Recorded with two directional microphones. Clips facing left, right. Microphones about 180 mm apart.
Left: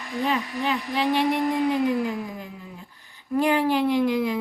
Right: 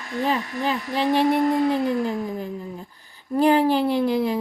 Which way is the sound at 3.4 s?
35° right (ahead or behind).